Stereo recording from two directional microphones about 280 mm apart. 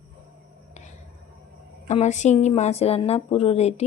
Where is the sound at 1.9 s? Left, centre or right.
Left.